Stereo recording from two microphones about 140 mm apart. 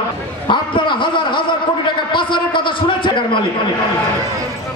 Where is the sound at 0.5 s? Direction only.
35° left (ahead or behind).